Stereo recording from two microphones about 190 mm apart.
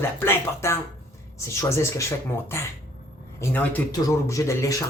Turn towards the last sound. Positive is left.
turn(degrees=15)  # may be behind; listen again after turning